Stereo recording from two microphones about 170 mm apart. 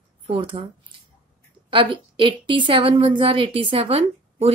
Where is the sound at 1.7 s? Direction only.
30° right (ahead or behind).